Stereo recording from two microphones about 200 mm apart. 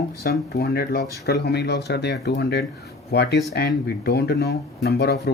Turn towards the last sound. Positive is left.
turn(degrees=50)  # may be behind; listen again after turning